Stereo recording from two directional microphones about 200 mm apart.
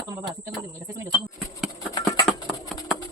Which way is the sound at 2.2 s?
Centre (ahead or behind).